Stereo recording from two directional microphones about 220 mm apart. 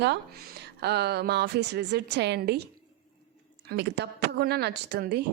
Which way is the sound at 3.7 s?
50° right (ahead or behind).